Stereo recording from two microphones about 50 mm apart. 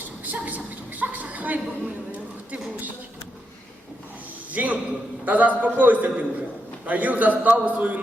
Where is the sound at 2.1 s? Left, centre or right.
Right.